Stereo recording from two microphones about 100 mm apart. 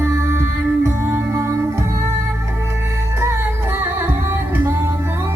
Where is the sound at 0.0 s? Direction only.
25° right (ahead or behind).